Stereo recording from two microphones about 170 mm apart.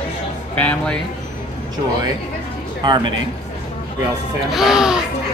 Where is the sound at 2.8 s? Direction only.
25° right (ahead or behind).